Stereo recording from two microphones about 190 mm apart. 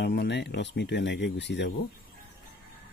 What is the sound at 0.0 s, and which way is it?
Speech, 65° left (ahead or behind).